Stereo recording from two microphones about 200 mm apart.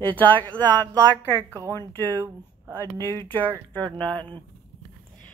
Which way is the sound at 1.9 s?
10° left (ahead or behind).